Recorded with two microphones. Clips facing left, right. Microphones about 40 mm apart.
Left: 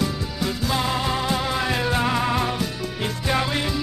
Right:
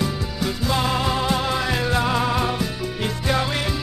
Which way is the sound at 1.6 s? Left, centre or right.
Centre.